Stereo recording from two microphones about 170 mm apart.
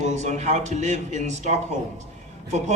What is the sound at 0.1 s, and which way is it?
A man's voice, 40° right (ahead or behind).